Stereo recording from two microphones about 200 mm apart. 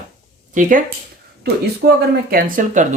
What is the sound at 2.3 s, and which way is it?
Speech, 40° right (ahead or behind).